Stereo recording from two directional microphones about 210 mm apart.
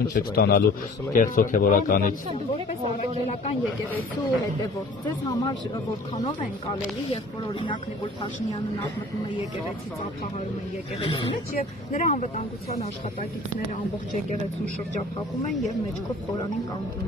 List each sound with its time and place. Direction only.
0.1 s a man's voice: 50° left (ahead or behind)
7.6 s speech: 25° left (ahead or behind)
11.5 s a man's voice: 40° left (ahead or behind)